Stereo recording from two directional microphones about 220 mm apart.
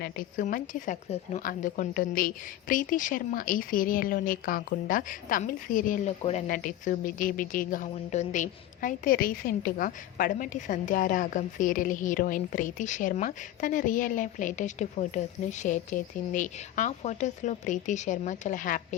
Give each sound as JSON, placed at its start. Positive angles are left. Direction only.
{"t": 0.0, "sound": "speech", "side_deg": 40}